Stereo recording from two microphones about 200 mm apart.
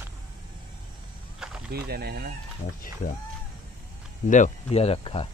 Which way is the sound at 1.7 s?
50° right (ahead or behind).